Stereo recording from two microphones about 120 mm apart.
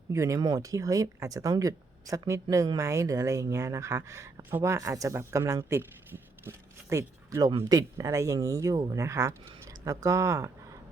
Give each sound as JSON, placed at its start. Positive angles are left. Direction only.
{"t": 0.1, "sound": "speech", "side_deg": -25}